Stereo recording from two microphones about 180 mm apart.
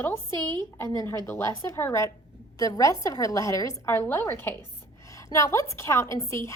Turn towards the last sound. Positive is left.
turn(degrees=15)  # may be behind; listen again after turning